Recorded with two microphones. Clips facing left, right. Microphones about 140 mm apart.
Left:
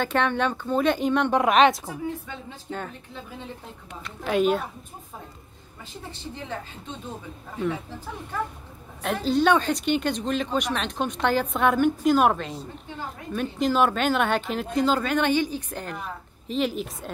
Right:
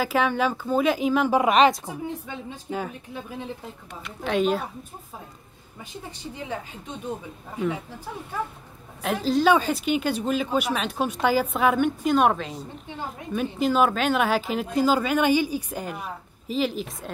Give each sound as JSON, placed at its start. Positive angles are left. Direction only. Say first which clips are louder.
{"t": 0.0, "sound": "a woman's voice", "louder": "right 1 dB", "side_deg": -5}
{"t": 1.9, "sound": "a woman's voice", "louder": "even", "side_deg": -20}
{"t": 4.0, "sound": "a woman's voice", "louder": "left 1 dB", "side_deg": 0}
{"t": 6.3, "sound": "a woman's voice", "louder": "right 3 dB", "side_deg": -10}